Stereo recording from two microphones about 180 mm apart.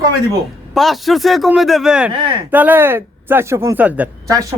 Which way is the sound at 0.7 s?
Centre (ahead or behind).